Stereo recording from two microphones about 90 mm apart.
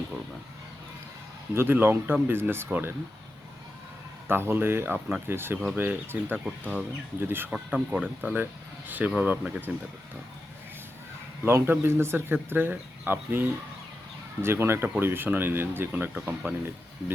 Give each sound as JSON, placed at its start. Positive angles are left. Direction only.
{"t": 1.5, "sound": "speech", "side_deg": -25}
{"t": 4.3, "sound": "speech", "side_deg": -25}
{"t": 6.4, "sound": "speech", "side_deg": -10}
{"t": 7.2, "sound": "speech", "side_deg": -25}
{"t": 7.5, "sound": "speech", "side_deg": -15}
{"t": 11.4, "sound": "speech", "side_deg": -25}
{"t": 16.1, "sound": "speech", "side_deg": -15}